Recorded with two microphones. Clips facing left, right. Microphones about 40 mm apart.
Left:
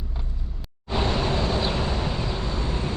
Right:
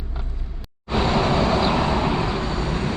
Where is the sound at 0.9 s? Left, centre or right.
Right.